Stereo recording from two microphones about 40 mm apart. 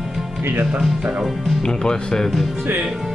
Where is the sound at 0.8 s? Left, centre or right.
Right.